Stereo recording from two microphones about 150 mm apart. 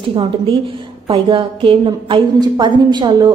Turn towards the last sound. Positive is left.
turn(degrees=-30)  # may be behind; listen again after turning